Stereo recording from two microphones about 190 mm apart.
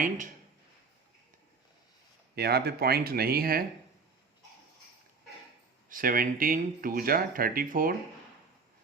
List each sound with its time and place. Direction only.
2.3 s speech: 55° right (ahead or behind)
5.9 s speech: 50° right (ahead or behind)